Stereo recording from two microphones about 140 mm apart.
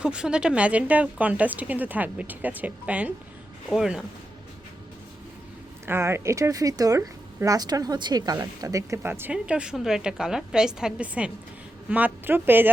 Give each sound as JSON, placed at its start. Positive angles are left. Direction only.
{"t": 0.0, "sound": "speech", "side_deg": -5}
{"t": 5.8, "sound": "speech", "side_deg": -15}